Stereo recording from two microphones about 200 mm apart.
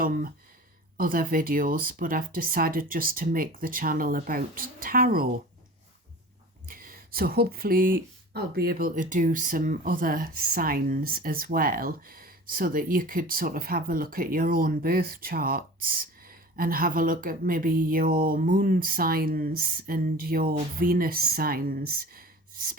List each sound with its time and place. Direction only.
0.0 s speech: 45° right (ahead or behind)
6.7 s speech: 45° right (ahead or behind)